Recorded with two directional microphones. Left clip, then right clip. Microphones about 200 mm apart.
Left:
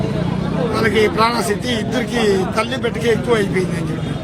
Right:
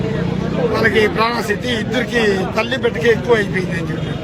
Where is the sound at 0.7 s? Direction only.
Centre (ahead or behind).